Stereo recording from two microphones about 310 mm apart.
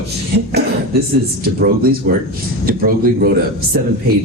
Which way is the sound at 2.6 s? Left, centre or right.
Right.